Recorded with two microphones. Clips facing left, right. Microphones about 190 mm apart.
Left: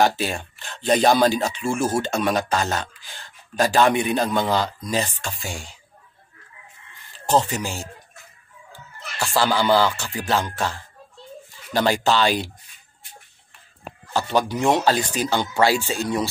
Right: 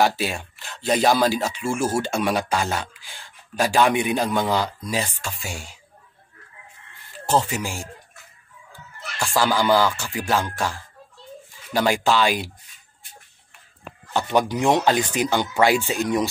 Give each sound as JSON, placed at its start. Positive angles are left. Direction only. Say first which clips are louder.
{"t": 0.0, "sound": "speech", "louder": "left 1 dB", "side_deg": -5}
{"t": 7.3, "sound": "speech", "louder": "left 1 dB", "side_deg": -10}
{"t": 9.6, "sound": "speech", "louder": "even", "side_deg": -10}
{"t": 14.1, "sound": "speech", "louder": "right 1 dB", "side_deg": -15}